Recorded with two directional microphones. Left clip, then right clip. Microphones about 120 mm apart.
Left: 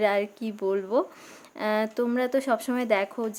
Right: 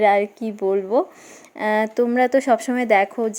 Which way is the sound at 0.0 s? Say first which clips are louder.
Right 8 dB; 10° right (ahead or behind).